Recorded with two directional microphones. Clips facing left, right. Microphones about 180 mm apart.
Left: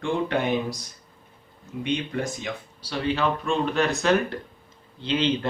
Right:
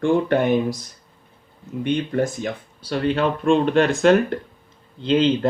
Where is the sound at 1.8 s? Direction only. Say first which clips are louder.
Right 6 dB; 50° right (ahead or behind).